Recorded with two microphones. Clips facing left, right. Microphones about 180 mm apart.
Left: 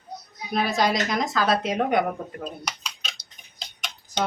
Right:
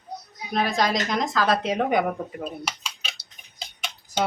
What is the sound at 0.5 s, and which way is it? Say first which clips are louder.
Speech: even; 5° left (ahead or behind).